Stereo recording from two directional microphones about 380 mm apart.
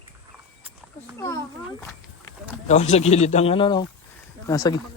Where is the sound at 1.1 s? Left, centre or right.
Centre.